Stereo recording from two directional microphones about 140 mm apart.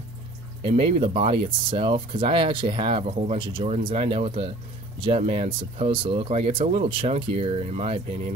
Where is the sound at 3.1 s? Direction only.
50° right (ahead or behind).